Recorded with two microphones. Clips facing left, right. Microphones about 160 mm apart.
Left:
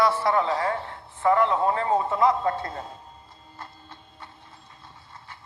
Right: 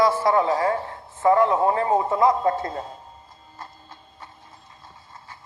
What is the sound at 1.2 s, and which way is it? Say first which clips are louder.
Speech: right 3 dB; 20° right (ahead or behind).